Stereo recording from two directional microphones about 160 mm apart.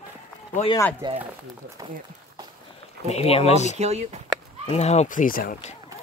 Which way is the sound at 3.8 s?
45° right (ahead or behind).